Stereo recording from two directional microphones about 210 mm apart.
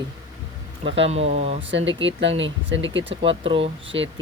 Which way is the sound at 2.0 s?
60° right (ahead or behind).